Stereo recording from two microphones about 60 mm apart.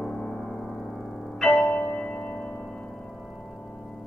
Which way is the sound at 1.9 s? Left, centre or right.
Left.